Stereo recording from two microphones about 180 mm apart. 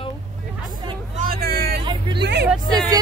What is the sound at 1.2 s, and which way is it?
Vehicle, 55° right (ahead or behind).